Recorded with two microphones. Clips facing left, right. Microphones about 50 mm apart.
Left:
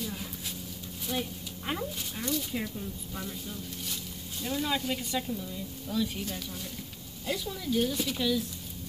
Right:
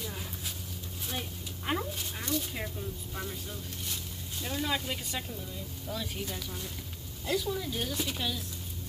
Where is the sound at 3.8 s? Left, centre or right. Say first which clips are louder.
Left 1 dB; right.